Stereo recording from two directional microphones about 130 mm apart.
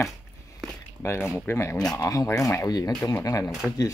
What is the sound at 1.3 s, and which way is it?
Speech, 20° left (ahead or behind).